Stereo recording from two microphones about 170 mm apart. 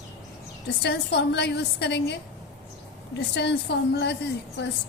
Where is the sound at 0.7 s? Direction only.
80° left.